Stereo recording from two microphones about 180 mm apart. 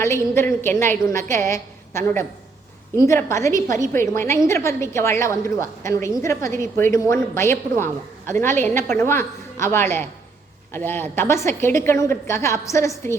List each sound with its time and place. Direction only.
0.0 s a woman's voice: 15° left (ahead or behind)